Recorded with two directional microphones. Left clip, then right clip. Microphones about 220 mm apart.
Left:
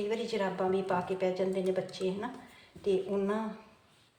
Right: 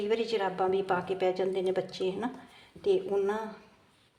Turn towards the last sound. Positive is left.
turn(degrees=-45)  # may be behind; listen again after turning